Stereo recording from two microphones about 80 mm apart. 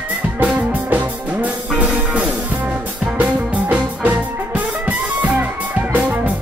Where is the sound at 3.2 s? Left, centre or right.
Right.